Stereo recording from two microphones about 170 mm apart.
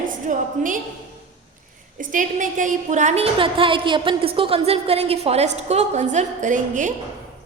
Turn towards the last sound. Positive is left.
turn(degrees=-50)  # may be behind; listen again after turning